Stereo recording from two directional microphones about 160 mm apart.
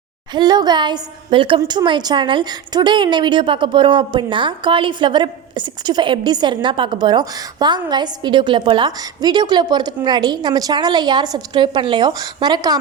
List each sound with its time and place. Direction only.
0.3 s a woman's voice: 25° right (ahead or behind)